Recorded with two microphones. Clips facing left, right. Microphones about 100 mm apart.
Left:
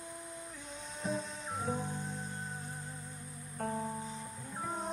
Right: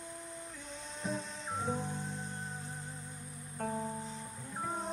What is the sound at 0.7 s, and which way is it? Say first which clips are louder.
Music: left 2 dB; 5° left (ahead or behind).